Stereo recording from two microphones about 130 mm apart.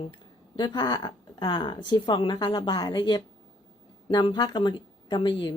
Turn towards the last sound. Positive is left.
turn(degrees=40)  # may be behind; listen again after turning